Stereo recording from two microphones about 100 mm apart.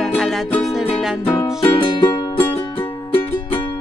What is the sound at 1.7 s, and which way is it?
Music, 55° left (ahead or behind).